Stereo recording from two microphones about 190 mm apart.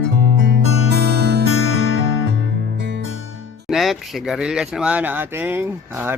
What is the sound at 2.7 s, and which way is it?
Music, 70° right (ahead or behind).